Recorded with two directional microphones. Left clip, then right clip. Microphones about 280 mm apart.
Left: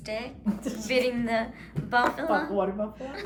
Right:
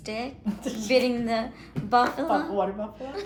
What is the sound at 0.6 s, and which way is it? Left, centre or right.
A woman's voice, centre.